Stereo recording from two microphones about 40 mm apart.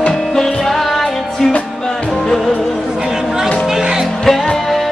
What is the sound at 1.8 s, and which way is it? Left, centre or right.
Music, centre.